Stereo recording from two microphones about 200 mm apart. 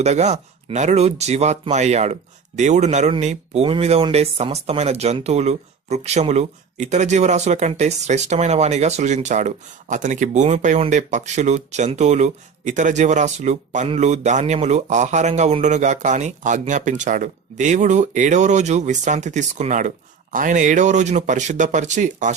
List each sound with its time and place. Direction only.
0.0 s speech: 35° right (ahead or behind)